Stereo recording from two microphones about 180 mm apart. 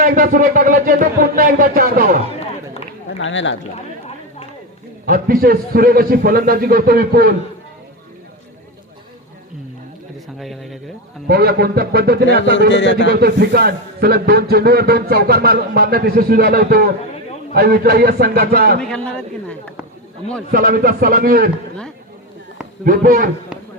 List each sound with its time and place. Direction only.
0.0 s speech: 50° right (ahead or behind)
3.2 s speech: 90° left
5.0 s a man's voice: 55° right (ahead or behind)
10.3 s a sound: centre (ahead or behind)
11.3 s a man's voice: 60° right (ahead or behind)
12.7 s speech: 85° left
13.1 s a man's voice: 60° right (ahead or behind)
18.8 s speech: 5° left (ahead or behind)
20.5 s a man's voice: 55° right (ahead or behind)
22.8 s speech: 50° right (ahead or behind)